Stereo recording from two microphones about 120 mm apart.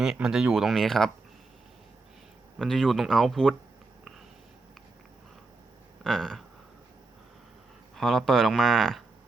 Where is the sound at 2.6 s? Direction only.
Centre (ahead or behind).